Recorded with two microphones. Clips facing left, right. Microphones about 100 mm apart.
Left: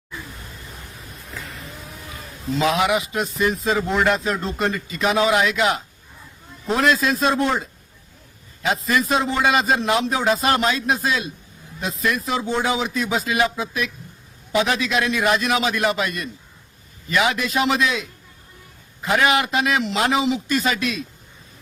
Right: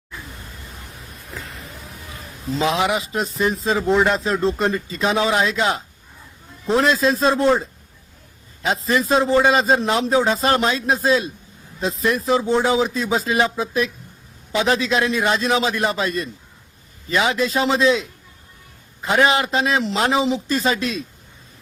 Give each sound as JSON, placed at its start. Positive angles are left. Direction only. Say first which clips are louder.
{"t": 2.6, "sound": "a man's voice", "louder": "even", "side_deg": -25}
{"t": 8.6, "sound": "a man's voice", "louder": "right 1 dB", "side_deg": -30}
{"t": 19.0, "sound": "a man's voice", "louder": "right 1 dB", "side_deg": -30}